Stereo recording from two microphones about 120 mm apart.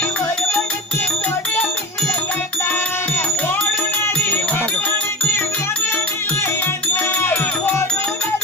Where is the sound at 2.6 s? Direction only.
15° left (ahead or behind).